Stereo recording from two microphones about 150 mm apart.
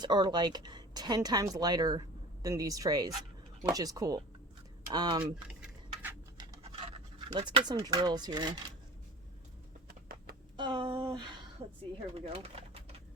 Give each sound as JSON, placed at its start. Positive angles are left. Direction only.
{"t": 0.0, "sound": "speech", "side_deg": -30}
{"t": 5.2, "sound": "a sound", "side_deg": -5}
{"t": 6.6, "sound": "scratch", "side_deg": -35}
{"t": 7.3, "sound": "speech", "side_deg": -35}
{"t": 10.6, "sound": "a sound", "side_deg": -30}
{"t": 12.1, "sound": "pigeon", "side_deg": -40}